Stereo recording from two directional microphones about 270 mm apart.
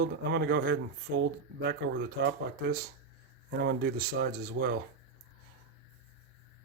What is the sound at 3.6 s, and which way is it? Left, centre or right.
Speech, right.